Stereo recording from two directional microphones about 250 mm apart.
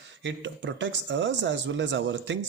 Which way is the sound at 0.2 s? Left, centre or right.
Right.